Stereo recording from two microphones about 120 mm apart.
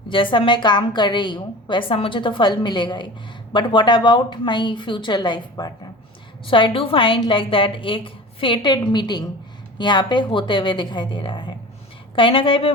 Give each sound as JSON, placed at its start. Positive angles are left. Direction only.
{"t": 0.1, "sound": "a woman's voice", "side_deg": 45}